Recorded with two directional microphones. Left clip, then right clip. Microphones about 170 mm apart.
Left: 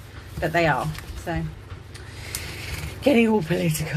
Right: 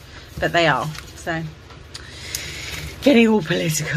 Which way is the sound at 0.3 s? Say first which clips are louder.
Right 4 dB; 30° right (ahead or behind).